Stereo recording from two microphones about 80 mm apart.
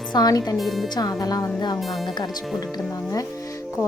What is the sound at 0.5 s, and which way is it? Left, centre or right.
Speech, centre.